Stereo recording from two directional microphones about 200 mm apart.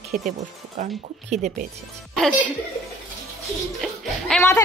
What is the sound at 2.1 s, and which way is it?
Speech, 5° left (ahead or behind).